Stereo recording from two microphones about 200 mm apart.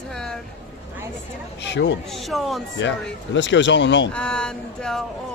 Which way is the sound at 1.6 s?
60° left (ahead or behind).